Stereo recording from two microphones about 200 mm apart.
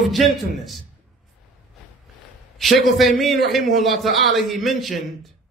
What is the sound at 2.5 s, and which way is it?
A man's voice, centre (ahead or behind).